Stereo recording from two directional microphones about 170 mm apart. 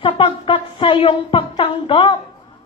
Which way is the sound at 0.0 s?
30° left (ahead or behind).